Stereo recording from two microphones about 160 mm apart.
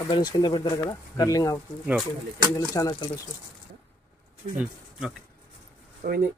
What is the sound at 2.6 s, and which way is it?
Speech, 25° left (ahead or behind).